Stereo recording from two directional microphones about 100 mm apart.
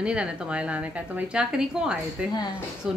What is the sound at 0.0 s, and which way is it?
A woman's voice, 10° right (ahead or behind).